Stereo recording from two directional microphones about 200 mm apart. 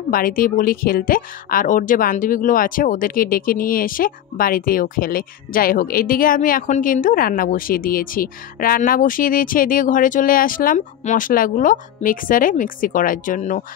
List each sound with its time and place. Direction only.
0.1 s speech: 45° left (ahead or behind)